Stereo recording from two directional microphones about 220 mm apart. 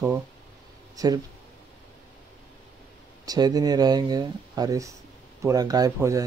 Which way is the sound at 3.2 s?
15° right (ahead or behind).